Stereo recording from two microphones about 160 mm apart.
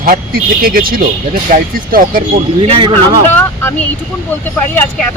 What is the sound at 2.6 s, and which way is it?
Speech, 30° right (ahead or behind).